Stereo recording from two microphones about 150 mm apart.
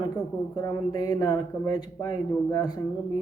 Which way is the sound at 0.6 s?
25° left (ahead or behind).